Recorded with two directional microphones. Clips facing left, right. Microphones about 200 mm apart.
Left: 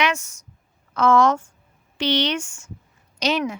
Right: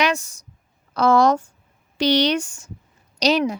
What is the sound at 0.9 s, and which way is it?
A woman's voice, 35° right (ahead or behind).